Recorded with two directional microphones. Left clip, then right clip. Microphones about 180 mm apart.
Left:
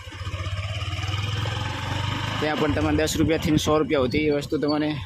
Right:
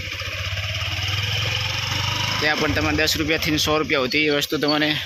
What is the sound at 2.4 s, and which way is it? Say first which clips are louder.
Speech: right 2 dB; 10° left (ahead or behind).